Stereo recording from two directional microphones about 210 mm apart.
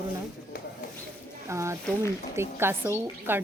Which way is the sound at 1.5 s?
15° right (ahead or behind).